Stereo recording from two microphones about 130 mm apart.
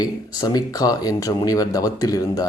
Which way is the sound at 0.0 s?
30° left (ahead or behind).